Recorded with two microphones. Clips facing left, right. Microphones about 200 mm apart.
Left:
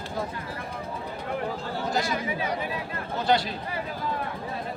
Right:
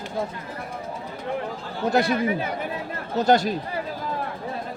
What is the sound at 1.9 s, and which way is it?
Speech, 60° right (ahead or behind).